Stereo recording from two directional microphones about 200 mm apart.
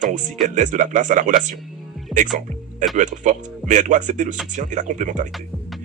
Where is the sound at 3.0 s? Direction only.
40° right (ahead or behind).